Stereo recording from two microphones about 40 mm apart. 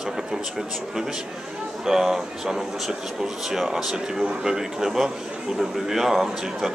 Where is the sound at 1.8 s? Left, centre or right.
Centre.